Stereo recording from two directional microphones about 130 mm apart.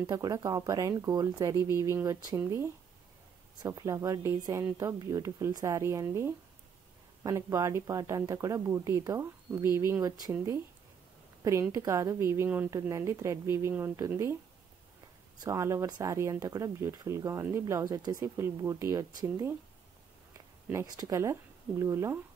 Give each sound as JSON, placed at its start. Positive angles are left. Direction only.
{"t": 0.0, "sound": "speech", "side_deg": -30}
{"t": 11.7, "sound": "speech", "side_deg": -25}
{"t": 15.4, "sound": "speech", "side_deg": -25}
{"t": 20.7, "sound": "speech", "side_deg": -30}